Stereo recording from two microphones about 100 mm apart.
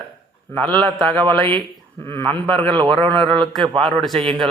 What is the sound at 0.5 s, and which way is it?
Speech, 15° left (ahead or behind).